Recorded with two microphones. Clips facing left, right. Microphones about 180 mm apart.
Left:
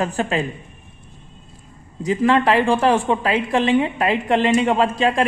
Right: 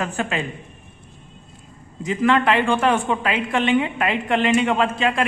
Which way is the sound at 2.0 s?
35° left (ahead or behind).